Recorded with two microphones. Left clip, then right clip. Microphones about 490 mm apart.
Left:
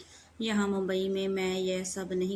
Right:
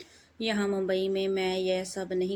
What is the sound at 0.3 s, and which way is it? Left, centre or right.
Speech, left.